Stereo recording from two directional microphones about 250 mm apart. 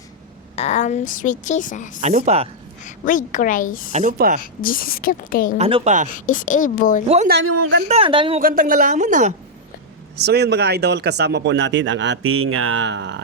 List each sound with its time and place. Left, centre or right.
0.5 s a woman's voice: left
2.0 s speech: right
2.8 s a woman's voice: left
3.9 s speech: right
4.6 s a woman's voice: left
5.5 s speech: right
6.1 s a woman's voice: left
7.4 s a man's voice: right
7.9 s speech: right
8.4 s speech: right
10.2 s a man's voice: right